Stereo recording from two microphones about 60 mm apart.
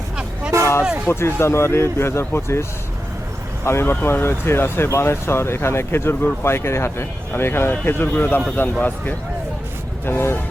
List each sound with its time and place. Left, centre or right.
0.5 s a sound: right
1.1 s speech: left
10.1 s speech: left